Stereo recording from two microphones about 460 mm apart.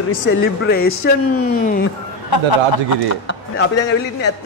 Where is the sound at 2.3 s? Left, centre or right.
Left.